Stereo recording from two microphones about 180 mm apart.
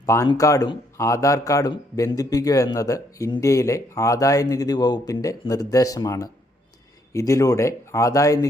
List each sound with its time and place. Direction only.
0.0 s speech: 15° left (ahead or behind)